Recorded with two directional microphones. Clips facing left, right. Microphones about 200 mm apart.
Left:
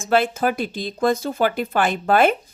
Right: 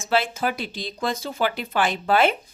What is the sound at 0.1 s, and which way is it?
Speech, 50° left (ahead or behind).